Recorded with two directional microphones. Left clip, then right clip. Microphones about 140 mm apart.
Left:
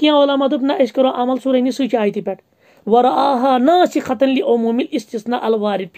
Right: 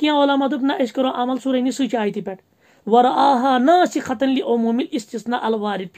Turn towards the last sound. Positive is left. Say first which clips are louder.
# left 4 dB
turn(degrees=35)  # may be behind; listen again after turning